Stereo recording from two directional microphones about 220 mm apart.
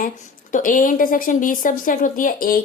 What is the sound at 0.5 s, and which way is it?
A woman's voice, 40° left (ahead or behind).